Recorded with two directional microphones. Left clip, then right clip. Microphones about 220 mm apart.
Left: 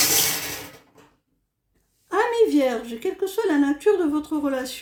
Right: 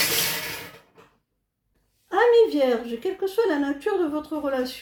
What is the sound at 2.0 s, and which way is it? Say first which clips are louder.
Speech: right 2 dB; 50° left (ahead or behind).